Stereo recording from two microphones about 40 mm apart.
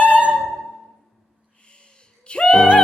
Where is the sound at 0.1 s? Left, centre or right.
Right.